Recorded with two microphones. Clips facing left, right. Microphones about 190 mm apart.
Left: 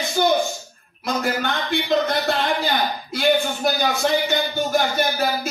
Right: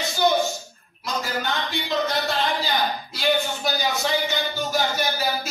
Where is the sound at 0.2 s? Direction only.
60° left (ahead or behind).